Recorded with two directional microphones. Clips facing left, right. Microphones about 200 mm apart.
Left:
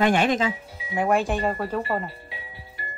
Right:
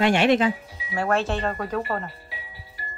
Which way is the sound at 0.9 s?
15° left (ahead or behind).